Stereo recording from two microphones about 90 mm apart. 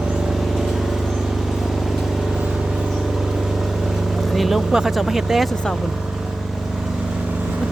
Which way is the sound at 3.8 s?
Centre (ahead or behind).